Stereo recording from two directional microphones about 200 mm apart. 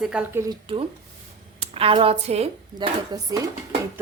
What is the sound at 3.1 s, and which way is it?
Dishes, 15° right (ahead or behind).